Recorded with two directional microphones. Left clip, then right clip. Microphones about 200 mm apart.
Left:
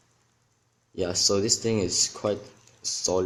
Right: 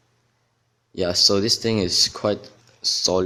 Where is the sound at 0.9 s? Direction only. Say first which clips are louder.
Right 6 dB; 25° right (ahead or behind).